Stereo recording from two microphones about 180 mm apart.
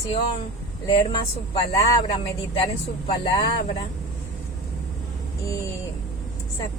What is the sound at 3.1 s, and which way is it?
Speech, 25° left (ahead or behind).